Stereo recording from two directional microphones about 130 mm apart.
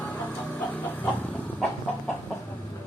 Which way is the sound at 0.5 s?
15° left (ahead or behind).